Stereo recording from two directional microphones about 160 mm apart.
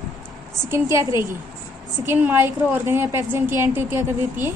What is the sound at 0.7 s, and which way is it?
A woman's voice, 20° right (ahead or behind).